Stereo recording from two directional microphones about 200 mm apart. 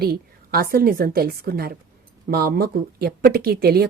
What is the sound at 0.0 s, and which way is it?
Speech, 50° right (ahead or behind).